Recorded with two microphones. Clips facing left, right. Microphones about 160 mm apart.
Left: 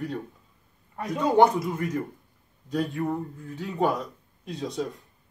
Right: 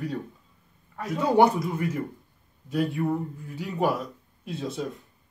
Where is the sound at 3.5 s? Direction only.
10° right (ahead or behind).